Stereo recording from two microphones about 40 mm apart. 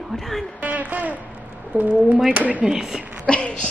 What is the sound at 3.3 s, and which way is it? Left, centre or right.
Speech, left.